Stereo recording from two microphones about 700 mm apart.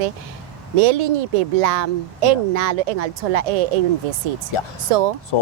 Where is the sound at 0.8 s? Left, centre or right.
Right.